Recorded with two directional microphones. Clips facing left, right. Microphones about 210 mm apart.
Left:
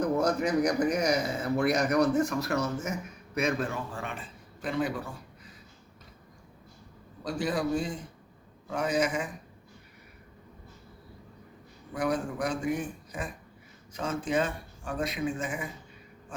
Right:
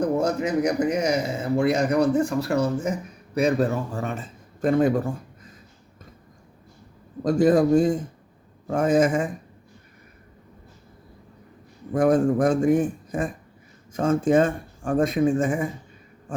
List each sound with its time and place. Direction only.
0.0 s speech: 25° right (ahead or behind); by 5.5 s 45° right (ahead or behind)
7.3 s speech: 45° right (ahead or behind)
11.9 s speech: 45° right (ahead or behind)